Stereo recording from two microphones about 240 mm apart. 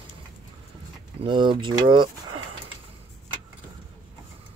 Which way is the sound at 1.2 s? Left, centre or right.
Centre.